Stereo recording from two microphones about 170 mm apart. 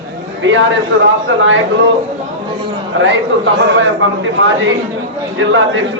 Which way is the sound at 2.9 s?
90° right.